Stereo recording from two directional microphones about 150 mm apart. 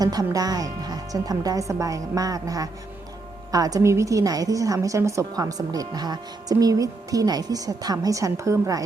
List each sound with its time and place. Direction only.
0.0 s a woman's voice: 25° right (ahead or behind)